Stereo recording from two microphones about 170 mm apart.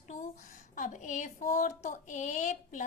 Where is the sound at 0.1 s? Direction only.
45° left (ahead or behind).